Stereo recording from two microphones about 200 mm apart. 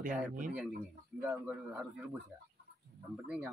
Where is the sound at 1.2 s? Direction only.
5° right (ahead or behind).